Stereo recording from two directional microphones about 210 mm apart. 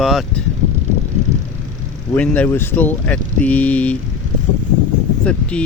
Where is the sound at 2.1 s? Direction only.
5° left (ahead or behind).